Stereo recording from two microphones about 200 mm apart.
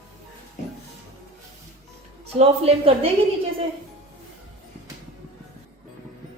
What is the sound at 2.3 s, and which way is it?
Speech, 30° right (ahead or behind).